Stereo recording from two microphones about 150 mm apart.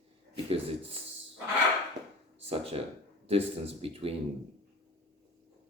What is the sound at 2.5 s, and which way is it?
Speech, 40° right (ahead or behind).